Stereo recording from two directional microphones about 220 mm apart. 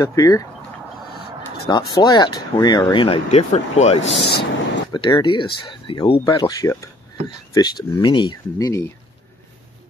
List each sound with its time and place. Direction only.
0.0 s speech: 15° left (ahead or behind)
1.7 s speech: 20° left (ahead or behind)
4.2 s speech: 50° left (ahead or behind)
4.9 s speech: 20° left (ahead or behind)